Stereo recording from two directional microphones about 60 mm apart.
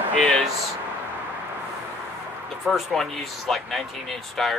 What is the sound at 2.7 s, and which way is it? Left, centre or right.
Speech, centre.